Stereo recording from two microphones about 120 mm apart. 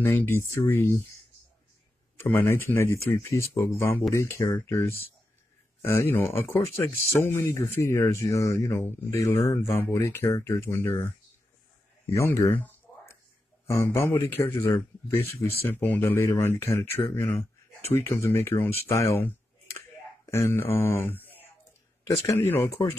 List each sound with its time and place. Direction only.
0.0 s speech: 15° left (ahead or behind)
2.1 s speech: 20° left (ahead or behind)
12.1 s a sound: 25° left (ahead or behind)
13.7 s speech: 20° left (ahead or behind)